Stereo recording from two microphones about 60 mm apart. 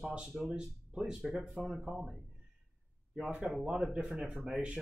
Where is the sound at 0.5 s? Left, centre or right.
Centre.